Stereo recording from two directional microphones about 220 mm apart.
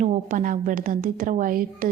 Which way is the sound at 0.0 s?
35° right (ahead or behind).